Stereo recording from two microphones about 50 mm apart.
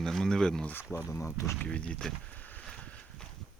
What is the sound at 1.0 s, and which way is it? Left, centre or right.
Speech, left.